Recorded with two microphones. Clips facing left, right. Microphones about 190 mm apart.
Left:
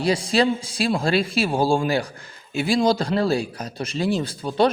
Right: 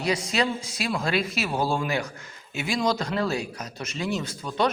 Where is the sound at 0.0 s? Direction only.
30° left (ahead or behind).